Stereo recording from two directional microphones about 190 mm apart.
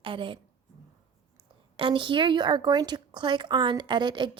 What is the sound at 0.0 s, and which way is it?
Speech, 25° right (ahead or behind).